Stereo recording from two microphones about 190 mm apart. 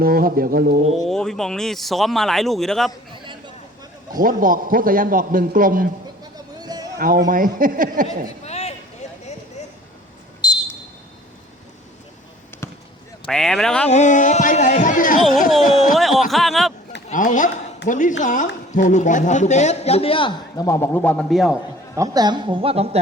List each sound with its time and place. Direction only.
0.0 s a man's voice: 50° right (ahead or behind)
0.9 s speech: centre (ahead or behind)
4.2 s a man's voice: 45° right (ahead or behind)
6.3 s a sound: 20° right (ahead or behind)
6.9 s a man's voice: 50° right (ahead or behind)
8.4 s a sound: 35° left (ahead or behind)
10.4 s a sound: 20° left (ahead or behind)
13.2 s speech: 5° left (ahead or behind)
13.8 s a man's voice: 35° left (ahead or behind)
16.0 s speech: centre (ahead or behind)
17.1 s a man's voice: 40° left (ahead or behind); by 20.7 s 25° left (ahead or behind)
20.7 s a man's voice: 15° left (ahead or behind)
21.9 s a woman's voice: 20° right (ahead or behind)